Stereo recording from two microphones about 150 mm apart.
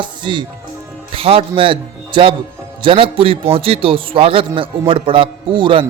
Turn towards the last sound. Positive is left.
turn(degrees=-35)  # may be behind; listen again after turning